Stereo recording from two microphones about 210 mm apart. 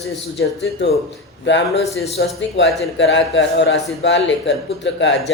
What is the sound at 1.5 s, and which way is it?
Speech, 60° left (ahead or behind).